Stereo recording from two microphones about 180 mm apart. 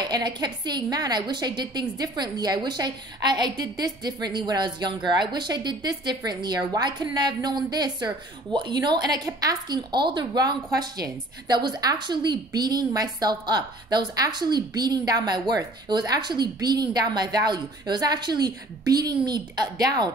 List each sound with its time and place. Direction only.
0.0 s a woman's voice: 25° right (ahead or behind)